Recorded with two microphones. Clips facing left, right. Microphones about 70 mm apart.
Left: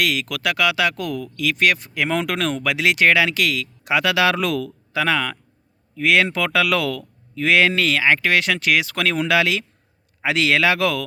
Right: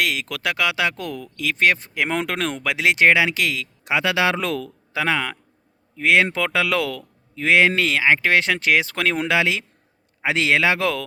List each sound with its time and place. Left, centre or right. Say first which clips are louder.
0.0 s speech: left 2 dB; right